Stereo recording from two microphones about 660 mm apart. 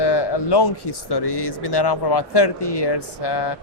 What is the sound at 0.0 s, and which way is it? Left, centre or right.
Speech, left.